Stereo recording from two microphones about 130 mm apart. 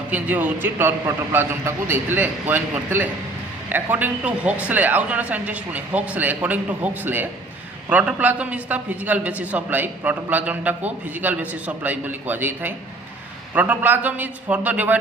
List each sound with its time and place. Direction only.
0.1 s a man's voice: 15° right (ahead or behind)